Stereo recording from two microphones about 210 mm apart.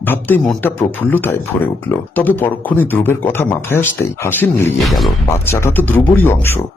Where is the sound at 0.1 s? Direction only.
10° left (ahead or behind).